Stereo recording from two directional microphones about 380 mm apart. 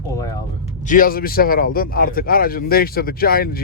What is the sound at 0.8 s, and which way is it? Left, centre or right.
A man's voice, left.